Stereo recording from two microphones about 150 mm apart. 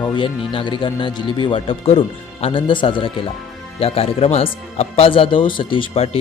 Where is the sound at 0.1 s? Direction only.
35° left (ahead or behind).